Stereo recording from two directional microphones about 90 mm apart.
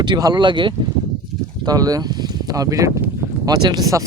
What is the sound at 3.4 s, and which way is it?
Speech, 50° right (ahead or behind).